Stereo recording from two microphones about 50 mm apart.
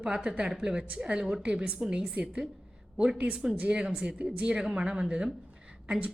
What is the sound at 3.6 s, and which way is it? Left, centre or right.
A woman's voice, centre.